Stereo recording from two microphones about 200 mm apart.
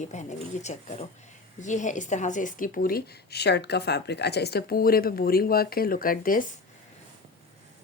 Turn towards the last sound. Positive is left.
turn(degrees=45)  # may be behind; listen again after turning